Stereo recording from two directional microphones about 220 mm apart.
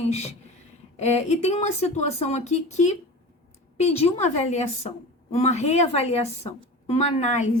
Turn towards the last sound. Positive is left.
turn(degrees=30)  # may be behind; listen again after turning